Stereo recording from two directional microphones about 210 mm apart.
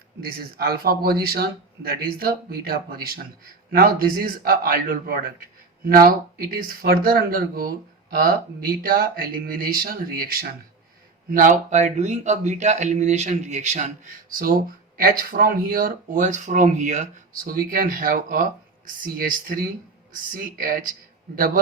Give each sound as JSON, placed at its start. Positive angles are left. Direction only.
{"t": 0.2, "sound": "speech", "side_deg": -45}